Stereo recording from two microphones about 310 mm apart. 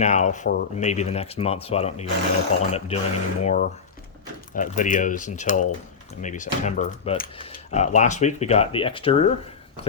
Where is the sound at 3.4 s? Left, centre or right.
Left.